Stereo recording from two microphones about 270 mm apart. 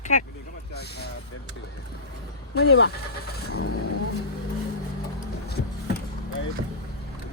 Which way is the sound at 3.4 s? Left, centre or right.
Left.